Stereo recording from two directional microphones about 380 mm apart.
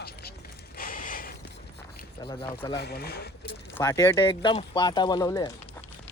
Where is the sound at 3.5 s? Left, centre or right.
Centre.